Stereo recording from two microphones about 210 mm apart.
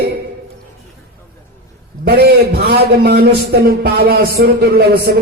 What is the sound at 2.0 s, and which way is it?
A man's voice, 50° right (ahead or behind).